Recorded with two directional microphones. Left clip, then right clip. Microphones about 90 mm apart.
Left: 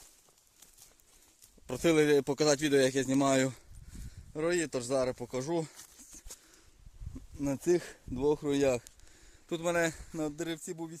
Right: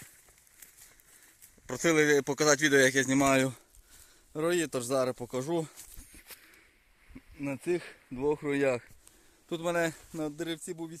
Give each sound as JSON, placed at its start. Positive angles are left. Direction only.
{"t": 1.6, "sound": "speech", "side_deg": 30}
{"t": 4.4, "sound": "speech", "side_deg": -30}
{"t": 7.3, "sound": "speech", "side_deg": 80}
{"t": 8.1, "sound": "speech", "side_deg": 50}
{"t": 9.5, "sound": "speech", "side_deg": -5}
{"t": 10.2, "sound": "speech", "side_deg": 10}